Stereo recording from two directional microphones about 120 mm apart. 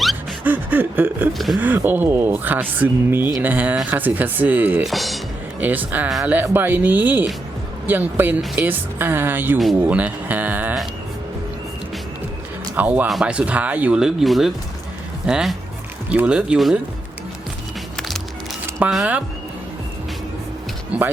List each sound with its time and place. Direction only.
0.4 s a sound: 15° right (ahead or behind)
1.3 s speech: centre (ahead or behind)
1.5 s speech: 15° right (ahead or behind)
4.9 s speech: centre (ahead or behind)
5.5 s speech: 15° right (ahead or behind)
12.7 s speech: 15° right (ahead or behind)
18.8 s speech: 5° right (ahead or behind)